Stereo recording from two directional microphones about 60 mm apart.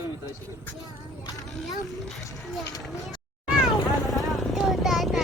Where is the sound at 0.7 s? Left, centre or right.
Left.